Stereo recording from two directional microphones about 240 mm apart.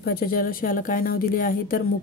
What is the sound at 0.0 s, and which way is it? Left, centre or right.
A woman's voice, left.